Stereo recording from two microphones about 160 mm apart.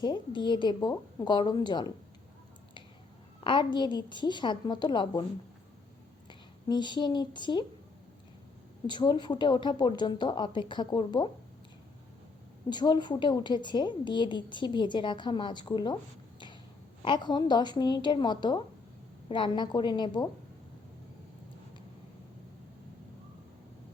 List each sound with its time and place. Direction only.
0.0 s a woman's voice: 30° left (ahead or behind)
3.4 s a woman's voice: 30° left (ahead or behind)
6.2 s a woman's voice: 30° left (ahead or behind)
8.9 s a woman's voice: 30° left (ahead or behind)
12.7 s a woman's voice: 25° left (ahead or behind)
17.0 s a woman's voice: 30° left (ahead or behind)